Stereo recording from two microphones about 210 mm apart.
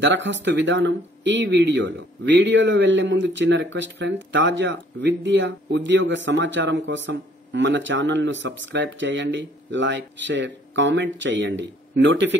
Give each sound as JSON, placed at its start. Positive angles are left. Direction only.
{"t": 0.0, "sound": "speech", "side_deg": -60}